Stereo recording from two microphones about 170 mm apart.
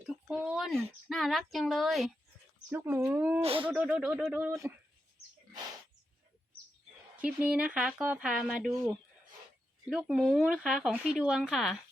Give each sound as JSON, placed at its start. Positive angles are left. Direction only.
{"t": 0.0, "sound": "speech", "side_deg": -5}
{"t": 2.6, "sound": "speech", "side_deg": -10}
{"t": 3.4, "sound": "speech", "side_deg": -30}
{"t": 3.7, "sound": "speech", "side_deg": -10}
{"t": 7.2, "sound": "speech", "side_deg": -10}
{"t": 9.8, "sound": "speech", "side_deg": -5}